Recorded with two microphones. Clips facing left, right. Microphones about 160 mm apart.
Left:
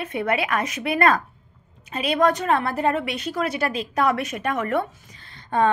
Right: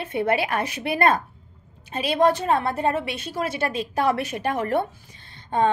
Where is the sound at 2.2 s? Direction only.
25° right (ahead or behind).